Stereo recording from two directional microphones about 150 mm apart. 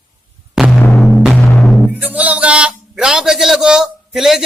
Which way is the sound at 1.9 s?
10° right (ahead or behind).